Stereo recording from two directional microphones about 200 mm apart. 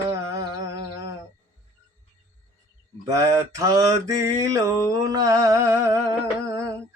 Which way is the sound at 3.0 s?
15° right (ahead or behind).